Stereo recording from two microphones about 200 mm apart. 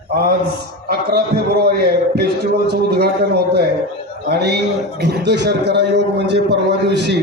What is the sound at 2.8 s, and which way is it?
A man's voice, 50° right (ahead or behind).